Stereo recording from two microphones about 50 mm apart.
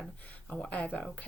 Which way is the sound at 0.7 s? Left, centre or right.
Left.